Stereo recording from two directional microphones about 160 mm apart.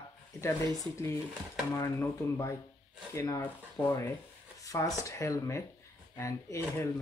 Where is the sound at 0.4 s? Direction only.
15° left (ahead or behind).